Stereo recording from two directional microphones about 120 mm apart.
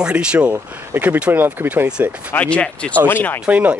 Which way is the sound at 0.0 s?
10° right (ahead or behind).